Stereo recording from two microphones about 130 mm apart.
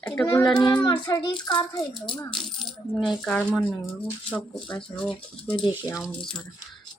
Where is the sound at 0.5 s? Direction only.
35° left (ahead or behind).